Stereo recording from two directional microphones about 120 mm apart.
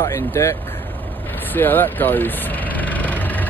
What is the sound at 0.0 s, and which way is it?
Speech, 25° left (ahead or behind).